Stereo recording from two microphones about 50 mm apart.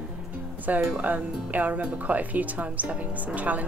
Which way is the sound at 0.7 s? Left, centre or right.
Right.